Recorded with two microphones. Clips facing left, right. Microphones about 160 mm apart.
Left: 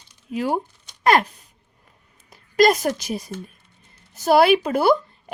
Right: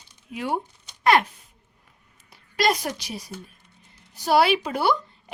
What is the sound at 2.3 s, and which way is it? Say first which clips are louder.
A woman's voice: left 7 dB; 45° left (ahead or behind).